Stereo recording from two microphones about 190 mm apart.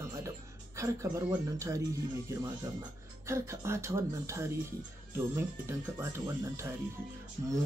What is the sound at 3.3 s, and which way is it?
Speech, 15° right (ahead or behind).